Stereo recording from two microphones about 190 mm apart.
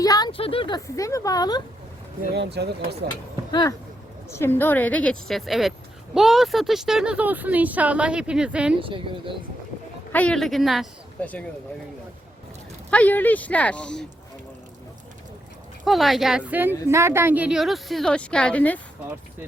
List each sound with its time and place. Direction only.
0.0 s a woman's voice: 20° left (ahead or behind)
2.3 s speech: 60° right (ahead or behind)
3.5 s a woman's voice: 20° left (ahead or behind); by 8.7 s 5° right (ahead or behind)
8.8 s speech: 25° right (ahead or behind)
10.1 s speech: 5° left (ahead or behind)
12.9 s a woman's voice: 10° left (ahead or behind)
15.8 s a woman's voice: centre (ahead or behind)